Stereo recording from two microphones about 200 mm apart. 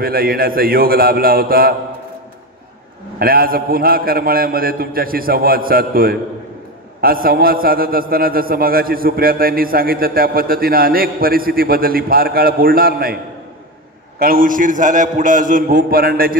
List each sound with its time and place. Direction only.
0.0 s a man's voice: 45° right (ahead or behind)
3.2 s a man's voice: 50° right (ahead or behind)
14.2 s a man's voice: 45° right (ahead or behind)